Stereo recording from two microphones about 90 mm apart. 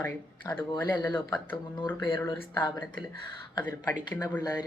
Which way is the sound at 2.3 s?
55° left (ahead or behind).